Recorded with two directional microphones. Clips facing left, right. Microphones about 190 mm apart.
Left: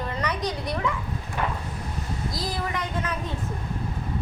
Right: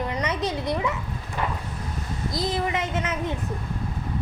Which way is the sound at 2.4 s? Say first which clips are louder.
Right 6 dB; 20° right (ahead or behind).